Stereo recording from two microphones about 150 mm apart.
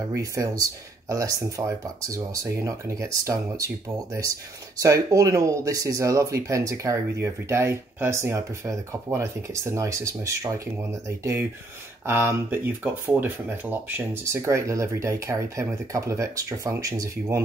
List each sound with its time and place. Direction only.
0.1 s speech: 20° right (ahead or behind)